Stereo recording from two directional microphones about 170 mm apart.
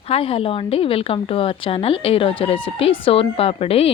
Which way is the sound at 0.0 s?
35° left (ahead or behind).